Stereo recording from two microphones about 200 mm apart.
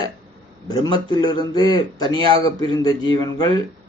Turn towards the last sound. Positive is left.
turn(degrees=20)  # may be behind; listen again after turning